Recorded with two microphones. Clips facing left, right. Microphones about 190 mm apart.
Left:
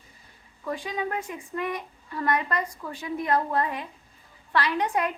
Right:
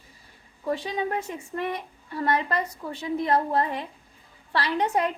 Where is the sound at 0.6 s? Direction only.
25° right (ahead or behind).